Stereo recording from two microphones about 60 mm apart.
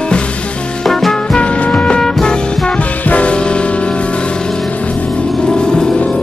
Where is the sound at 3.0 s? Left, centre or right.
Left.